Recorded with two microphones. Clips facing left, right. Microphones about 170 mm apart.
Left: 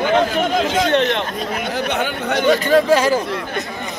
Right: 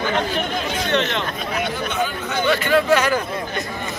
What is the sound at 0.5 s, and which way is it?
Speech, 90° left.